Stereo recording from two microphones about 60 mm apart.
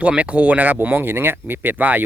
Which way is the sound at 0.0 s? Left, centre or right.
Right.